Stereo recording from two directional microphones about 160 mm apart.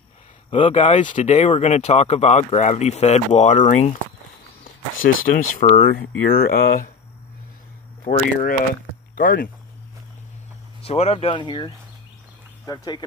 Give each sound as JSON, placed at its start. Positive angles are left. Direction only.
{"t": 0.5, "sound": "speech", "side_deg": 35}
{"t": 0.8, "sound": "speech", "side_deg": 50}
{"t": 5.0, "sound": "speech", "side_deg": 55}
{"t": 5.9, "sound": "speech", "side_deg": 70}
{"t": 8.0, "sound": "speech", "side_deg": 55}
{"t": 10.8, "sound": "speech", "side_deg": 40}